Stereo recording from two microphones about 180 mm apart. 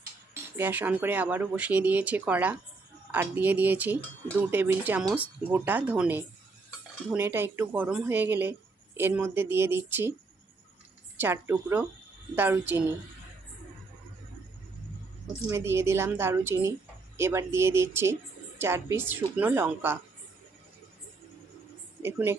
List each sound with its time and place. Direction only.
0.5 s speech: 10° right (ahead or behind)
11.2 s speech: 10° right (ahead or behind)
15.4 s speech: 15° right (ahead or behind)
22.0 s speech: 15° right (ahead or behind)